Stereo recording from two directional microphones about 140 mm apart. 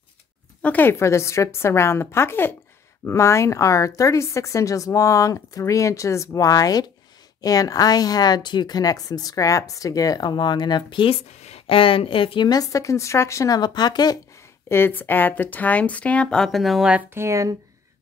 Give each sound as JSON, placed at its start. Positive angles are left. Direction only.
{"t": 0.6, "sound": "a woman's voice", "side_deg": 10}
{"t": 14.7, "sound": "speech", "side_deg": 15}
{"t": 17.1, "sound": "speech", "side_deg": -20}